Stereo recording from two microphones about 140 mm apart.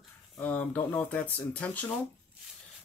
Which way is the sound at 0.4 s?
10° left (ahead or behind).